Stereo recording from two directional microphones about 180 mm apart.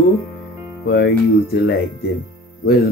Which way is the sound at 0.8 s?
60° left (ahead or behind).